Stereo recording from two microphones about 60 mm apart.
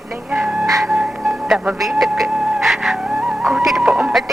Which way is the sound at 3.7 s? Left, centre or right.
Centre.